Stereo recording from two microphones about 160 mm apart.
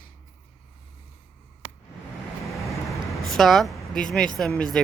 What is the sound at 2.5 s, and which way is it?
Vehicle, centre (ahead or behind).